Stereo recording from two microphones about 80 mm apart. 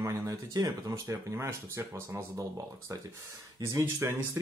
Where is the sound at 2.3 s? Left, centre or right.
Right.